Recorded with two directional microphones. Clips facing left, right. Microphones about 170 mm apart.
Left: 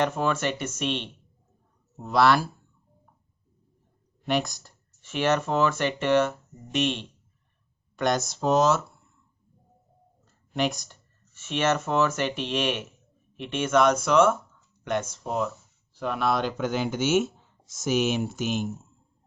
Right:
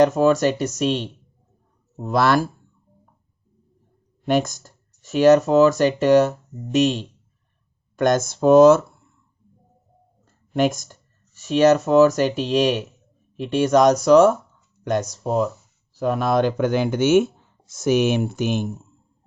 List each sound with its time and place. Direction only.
0.0 s speech: 40° right (ahead or behind)
4.3 s speech: 45° right (ahead or behind)
10.5 s speech: 45° right (ahead or behind)